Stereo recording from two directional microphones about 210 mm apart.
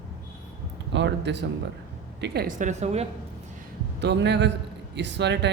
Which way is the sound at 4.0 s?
55° right (ahead or behind).